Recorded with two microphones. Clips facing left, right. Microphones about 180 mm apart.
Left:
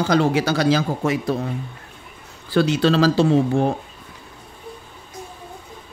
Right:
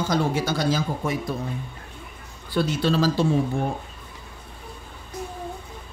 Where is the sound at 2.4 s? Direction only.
80° left.